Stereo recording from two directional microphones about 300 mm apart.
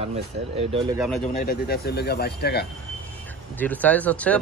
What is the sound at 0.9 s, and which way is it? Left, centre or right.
Speech, centre.